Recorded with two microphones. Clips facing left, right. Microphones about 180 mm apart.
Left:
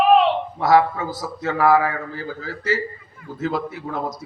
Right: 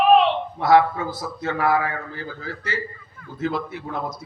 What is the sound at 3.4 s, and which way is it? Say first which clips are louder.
Speech: left 1 dB; 40° left (ahead or behind).